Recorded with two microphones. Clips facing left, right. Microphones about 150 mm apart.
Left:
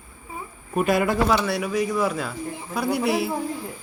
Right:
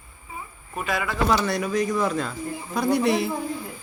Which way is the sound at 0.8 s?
45° left (ahead or behind).